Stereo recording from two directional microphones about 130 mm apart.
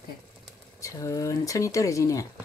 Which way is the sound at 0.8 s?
25° left (ahead or behind).